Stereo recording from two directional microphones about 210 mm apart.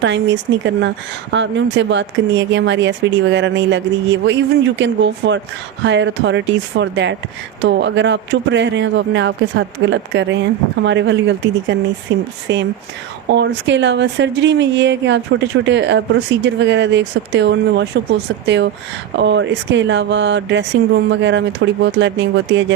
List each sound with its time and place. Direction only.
0.0 s speech: 60° right (ahead or behind)